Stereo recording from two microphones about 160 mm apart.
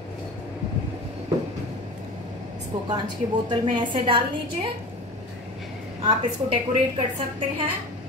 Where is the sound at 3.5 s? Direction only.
30° right (ahead or behind).